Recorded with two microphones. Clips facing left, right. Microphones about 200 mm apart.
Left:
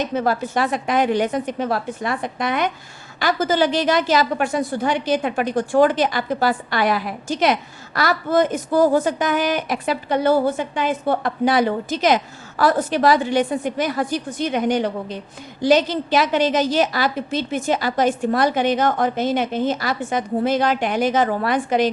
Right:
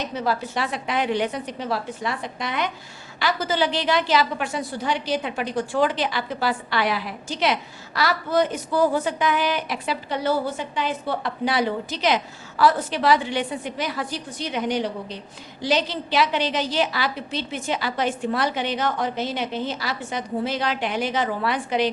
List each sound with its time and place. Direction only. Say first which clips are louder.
0.0 s a woman's voice: left 5 dB; 50° left (ahead or behind)